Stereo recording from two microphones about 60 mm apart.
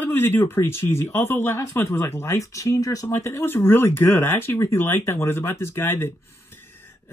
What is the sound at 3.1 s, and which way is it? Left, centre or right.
Speech, left.